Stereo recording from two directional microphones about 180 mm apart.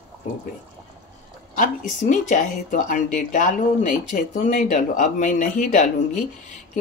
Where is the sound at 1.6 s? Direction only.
45° left (ahead or behind).